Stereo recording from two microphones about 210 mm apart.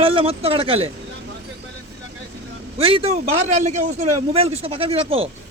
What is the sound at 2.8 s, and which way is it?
A man's voice, 25° right (ahead or behind).